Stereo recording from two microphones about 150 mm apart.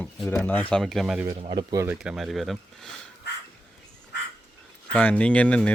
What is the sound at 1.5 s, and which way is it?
Speech, 25° right (ahead or behind).